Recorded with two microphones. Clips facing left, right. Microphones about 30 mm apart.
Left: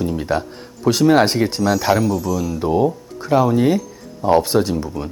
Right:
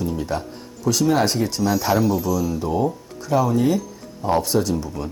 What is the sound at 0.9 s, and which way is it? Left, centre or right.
Speech, left.